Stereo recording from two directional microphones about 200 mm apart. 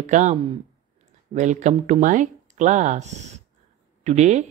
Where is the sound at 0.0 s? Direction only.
35° right (ahead or behind).